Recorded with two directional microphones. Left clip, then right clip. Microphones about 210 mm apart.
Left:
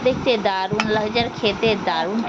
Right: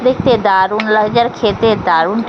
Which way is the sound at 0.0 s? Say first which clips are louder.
Right 7 dB; 20° right (ahead or behind).